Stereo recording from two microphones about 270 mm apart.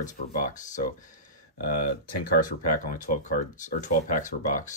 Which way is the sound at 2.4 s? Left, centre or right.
Left.